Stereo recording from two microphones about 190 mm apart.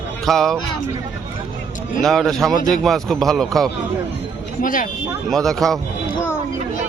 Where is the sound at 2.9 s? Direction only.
Centre (ahead or behind).